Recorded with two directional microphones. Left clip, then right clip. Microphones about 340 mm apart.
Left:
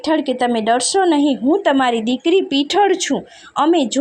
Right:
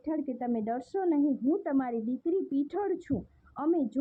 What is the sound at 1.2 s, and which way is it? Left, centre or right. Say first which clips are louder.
A woman's voice: left 15 dB; left.